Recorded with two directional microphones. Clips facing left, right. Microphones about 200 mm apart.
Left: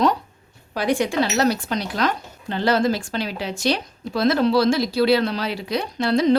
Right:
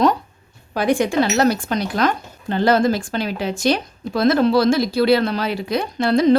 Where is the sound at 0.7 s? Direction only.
50° right (ahead or behind).